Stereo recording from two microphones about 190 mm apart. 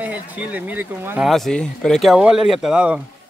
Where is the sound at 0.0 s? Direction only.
10° right (ahead or behind).